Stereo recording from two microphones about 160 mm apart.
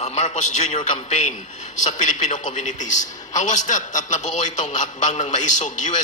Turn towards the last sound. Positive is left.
turn(degrees=50)  # may be behind; listen again after turning